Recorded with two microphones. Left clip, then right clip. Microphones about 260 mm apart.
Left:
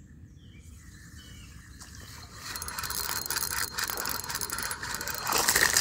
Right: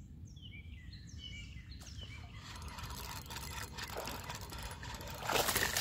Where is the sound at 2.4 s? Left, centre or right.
Left.